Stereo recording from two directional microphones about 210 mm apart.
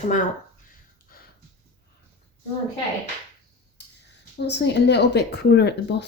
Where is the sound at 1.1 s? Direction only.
45° left (ahead or behind).